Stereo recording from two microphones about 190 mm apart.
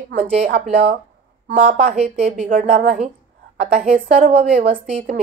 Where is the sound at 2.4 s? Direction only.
45° right (ahead or behind).